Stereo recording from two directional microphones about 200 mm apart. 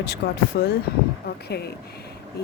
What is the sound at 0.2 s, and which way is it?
Speech, 55° left (ahead or behind).